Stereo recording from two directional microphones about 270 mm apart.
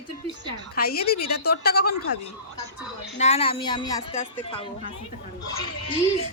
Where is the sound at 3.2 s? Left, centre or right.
Left.